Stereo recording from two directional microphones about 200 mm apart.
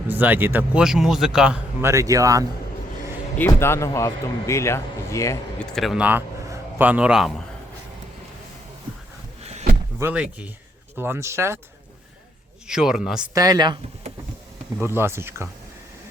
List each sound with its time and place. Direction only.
0.1 s speech: 10° right (ahead or behind)
3.3 s a man's voice: 10° left (ahead or behind)
5.6 s speech: centre (ahead or behind)
9.4 s a sound: 35° right (ahead or behind)
10.0 s speech: 10° right (ahead or behind)
12.6 s speech: 5° right (ahead or behind)
13.3 s speech: 20° right (ahead or behind)
14.8 s speech: 10° right (ahead or behind)